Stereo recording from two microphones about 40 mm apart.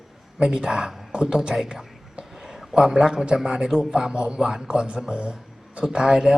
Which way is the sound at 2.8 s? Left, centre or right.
Centre.